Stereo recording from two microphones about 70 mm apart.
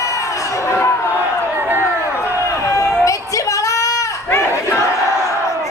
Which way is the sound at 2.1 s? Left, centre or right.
Left.